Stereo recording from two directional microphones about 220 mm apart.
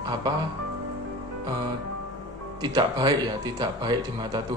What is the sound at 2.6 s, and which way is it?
A man's voice, 20° right (ahead or behind).